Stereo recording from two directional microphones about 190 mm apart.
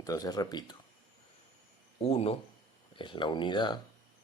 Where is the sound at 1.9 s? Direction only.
30° left (ahead or behind).